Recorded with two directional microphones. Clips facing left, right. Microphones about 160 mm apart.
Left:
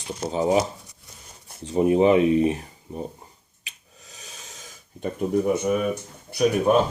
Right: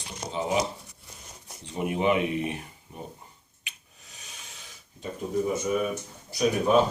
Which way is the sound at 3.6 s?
35° left (ahead or behind).